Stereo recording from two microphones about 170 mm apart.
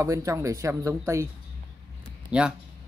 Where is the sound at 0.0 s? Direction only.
20° right (ahead or behind).